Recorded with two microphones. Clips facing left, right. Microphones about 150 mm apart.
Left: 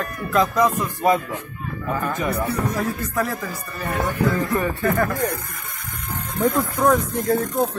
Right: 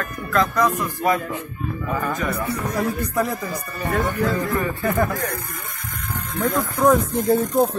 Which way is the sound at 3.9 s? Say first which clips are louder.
Even; 15° left (ahead or behind).